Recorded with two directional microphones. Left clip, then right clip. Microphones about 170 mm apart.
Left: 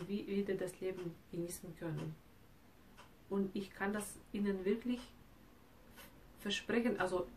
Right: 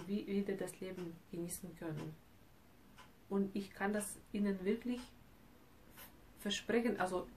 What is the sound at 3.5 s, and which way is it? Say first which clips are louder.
Speech: right 1 dB; 15° right (ahead or behind).